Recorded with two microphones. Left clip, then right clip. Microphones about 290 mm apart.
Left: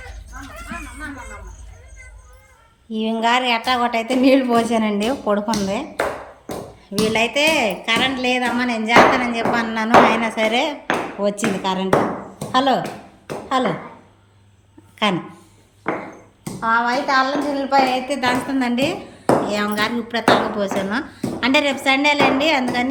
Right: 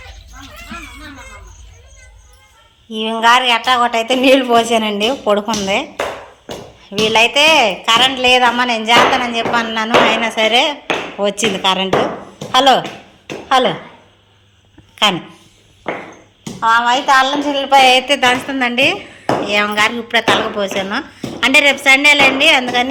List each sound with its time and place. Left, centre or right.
2.9 s speech: centre
6.9 s speech: centre
13.2 s a sound: centre
16.6 s a woman's voice: right
18.1 s speech: centre